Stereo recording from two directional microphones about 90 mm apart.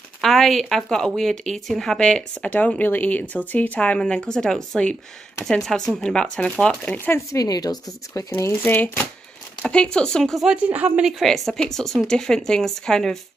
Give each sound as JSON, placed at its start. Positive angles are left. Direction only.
{"t": 0.2, "sound": "speech", "side_deg": 5}
{"t": 7.3, "sound": "speech", "side_deg": 45}
{"t": 9.7, "sound": "speech", "side_deg": 10}
{"t": 10.4, "sound": "speech", "side_deg": -15}
{"t": 11.1, "sound": "speech", "side_deg": 0}